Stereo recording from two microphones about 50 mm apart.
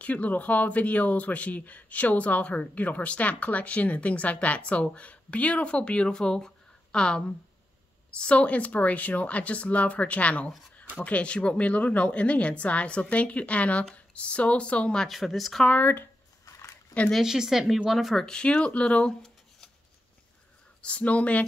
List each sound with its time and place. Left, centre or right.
0.0 s speech: left
15.0 s speech: centre
15.7 s speech: left
17.2 s speech: centre
18.2 s speech: centre
20.8 s speech: left